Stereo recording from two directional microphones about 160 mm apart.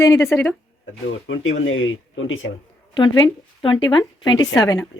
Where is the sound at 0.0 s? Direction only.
20° left (ahead or behind).